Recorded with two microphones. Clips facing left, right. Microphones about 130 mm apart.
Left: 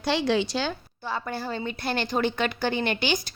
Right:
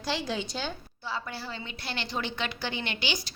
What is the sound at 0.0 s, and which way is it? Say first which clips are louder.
Speech: left 8 dB; 65° left (ahead or behind).